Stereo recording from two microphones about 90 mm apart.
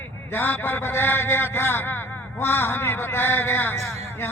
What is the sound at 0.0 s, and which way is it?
A man's voice, 25° left (ahead or behind).